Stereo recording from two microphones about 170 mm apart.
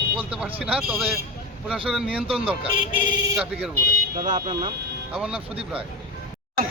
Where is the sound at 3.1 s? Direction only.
25° right (ahead or behind).